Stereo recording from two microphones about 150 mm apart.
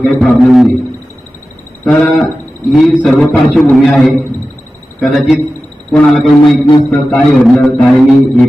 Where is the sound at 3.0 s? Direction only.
5° left (ahead or behind).